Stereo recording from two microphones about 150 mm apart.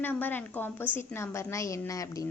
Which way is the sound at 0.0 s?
15° left (ahead or behind).